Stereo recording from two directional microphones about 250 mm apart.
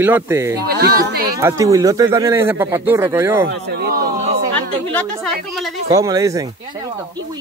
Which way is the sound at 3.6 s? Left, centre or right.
Right.